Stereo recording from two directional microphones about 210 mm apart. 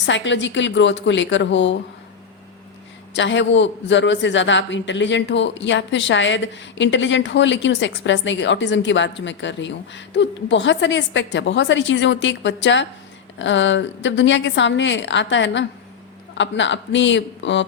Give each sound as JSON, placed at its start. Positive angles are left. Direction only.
{"t": 0.0, "sound": "a man's voice", "side_deg": 60}
{"t": 3.2, "sound": "a man's voice", "side_deg": 60}